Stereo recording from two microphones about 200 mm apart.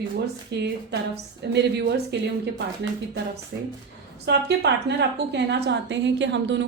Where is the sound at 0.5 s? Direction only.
55° right (ahead or behind).